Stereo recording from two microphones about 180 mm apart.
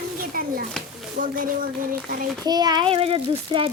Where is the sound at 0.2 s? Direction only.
50° right (ahead or behind).